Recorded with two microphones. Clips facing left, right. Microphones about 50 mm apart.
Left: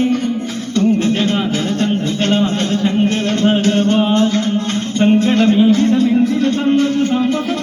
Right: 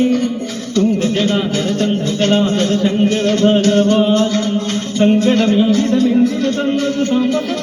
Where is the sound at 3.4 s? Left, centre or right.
Centre.